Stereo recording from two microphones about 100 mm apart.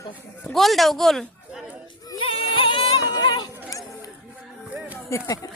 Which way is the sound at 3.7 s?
35° left (ahead or behind).